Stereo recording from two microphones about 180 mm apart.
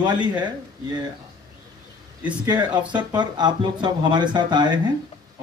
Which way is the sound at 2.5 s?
25° right (ahead or behind).